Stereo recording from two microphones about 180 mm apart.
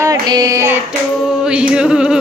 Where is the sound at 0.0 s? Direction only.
20° right (ahead or behind).